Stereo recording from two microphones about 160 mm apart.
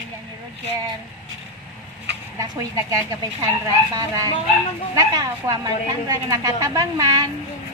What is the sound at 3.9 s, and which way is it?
A woman's voice, 20° right (ahead or behind).